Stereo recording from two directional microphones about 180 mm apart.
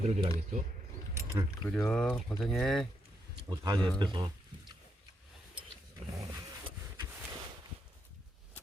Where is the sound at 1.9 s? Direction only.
5° left (ahead or behind).